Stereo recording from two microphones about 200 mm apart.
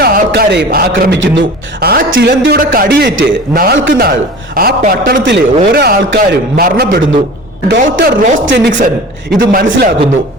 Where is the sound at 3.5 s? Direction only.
50° right (ahead or behind).